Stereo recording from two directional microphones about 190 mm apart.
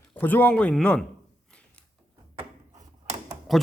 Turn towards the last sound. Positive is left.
turn(degrees=0)  # may be behind; listen again after turning